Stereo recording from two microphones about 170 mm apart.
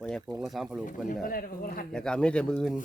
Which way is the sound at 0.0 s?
5° left (ahead or behind).